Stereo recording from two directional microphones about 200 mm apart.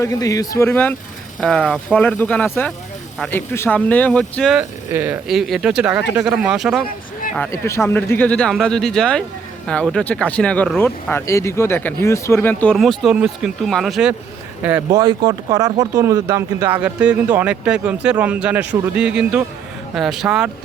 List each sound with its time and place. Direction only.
0.0 s speech: 15° left (ahead or behind)
4.9 s speech: 10° right (ahead or behind)
7.3 s speech: 10° left (ahead or behind); by 14.8 s 10° right (ahead or behind)
14.9 s speech: 20° right (ahead or behind); by 20.5 s 5° right (ahead or behind)